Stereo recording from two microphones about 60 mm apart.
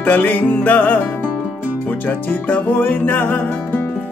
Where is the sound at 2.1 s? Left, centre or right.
Left.